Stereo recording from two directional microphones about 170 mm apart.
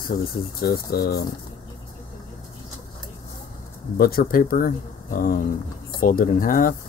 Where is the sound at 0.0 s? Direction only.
60° left (ahead or behind).